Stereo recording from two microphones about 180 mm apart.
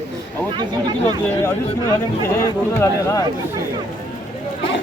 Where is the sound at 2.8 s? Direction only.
15° left (ahead or behind).